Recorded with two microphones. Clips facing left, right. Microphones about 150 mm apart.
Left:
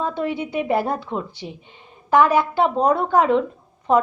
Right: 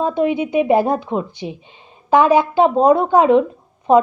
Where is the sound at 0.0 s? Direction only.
20° right (ahead or behind).